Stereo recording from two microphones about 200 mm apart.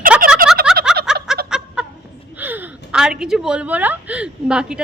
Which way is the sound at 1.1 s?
5° right (ahead or behind).